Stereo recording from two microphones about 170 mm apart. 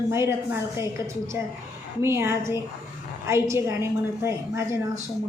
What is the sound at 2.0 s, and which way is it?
A woman's voice, 15° right (ahead or behind).